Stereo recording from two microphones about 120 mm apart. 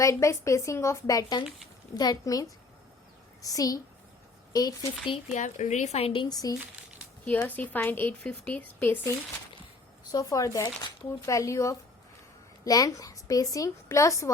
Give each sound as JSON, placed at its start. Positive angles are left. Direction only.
{"t": 0.0, "sound": "a woman's voice", "side_deg": 25}
{"t": 5.3, "sound": "a woman's voice", "side_deg": 85}
{"t": 6.2, "sound": "a woman's voice", "side_deg": 30}
{"t": 7.4, "sound": "speech", "side_deg": 15}
{"t": 10.1, "sound": "speech", "side_deg": 30}